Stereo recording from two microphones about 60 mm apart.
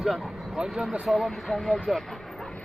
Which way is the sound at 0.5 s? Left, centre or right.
Centre.